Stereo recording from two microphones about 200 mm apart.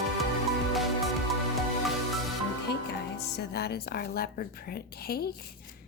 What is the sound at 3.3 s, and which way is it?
A woman's voice, 55° left (ahead or behind).